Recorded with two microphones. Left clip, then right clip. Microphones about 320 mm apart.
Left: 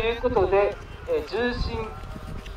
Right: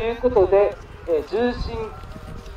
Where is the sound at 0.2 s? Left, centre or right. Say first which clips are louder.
Right 6 dB; right.